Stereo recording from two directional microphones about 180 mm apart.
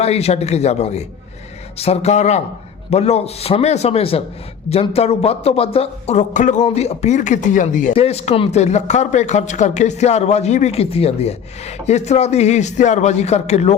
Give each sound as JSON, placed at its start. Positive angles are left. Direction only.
{"t": 0.0, "sound": "speech", "side_deg": 35}
{"t": 7.9, "sound": "speech", "side_deg": 35}